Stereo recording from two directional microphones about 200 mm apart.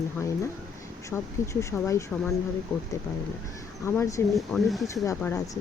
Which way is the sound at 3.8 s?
15° left (ahead or behind).